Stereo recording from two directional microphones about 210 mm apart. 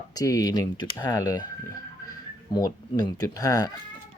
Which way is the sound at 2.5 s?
20° left (ahead or behind).